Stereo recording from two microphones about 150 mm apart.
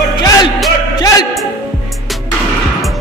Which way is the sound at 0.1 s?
25° left (ahead or behind).